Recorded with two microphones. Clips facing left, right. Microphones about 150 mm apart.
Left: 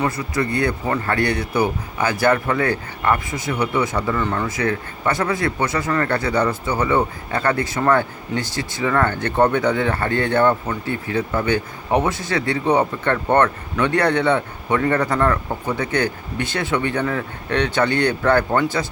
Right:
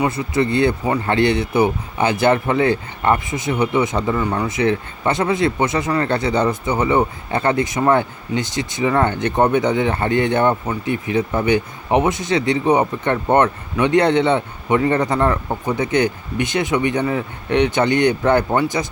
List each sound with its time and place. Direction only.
0.2 s speech: 25° right (ahead or behind)